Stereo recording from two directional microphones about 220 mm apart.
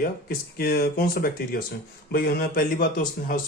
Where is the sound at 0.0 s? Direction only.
40° left (ahead or behind).